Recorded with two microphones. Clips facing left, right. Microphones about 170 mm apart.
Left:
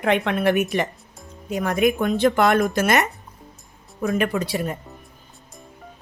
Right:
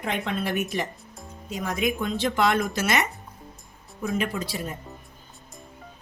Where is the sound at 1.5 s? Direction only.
55° left (ahead or behind).